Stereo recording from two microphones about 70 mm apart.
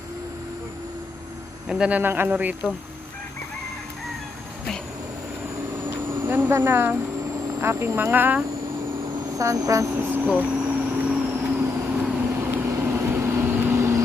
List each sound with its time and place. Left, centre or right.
1.6 s speech: centre
1.9 s speech: right
5.7 s vehicle: right
6.6 s speech: right
9.4 s vehicle: right
9.9 s speech: right
10.3 s vehicle: centre
13.7 s vehicle: right